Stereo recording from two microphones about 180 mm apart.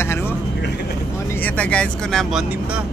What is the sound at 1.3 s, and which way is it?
A man's voice, 10° left (ahead or behind).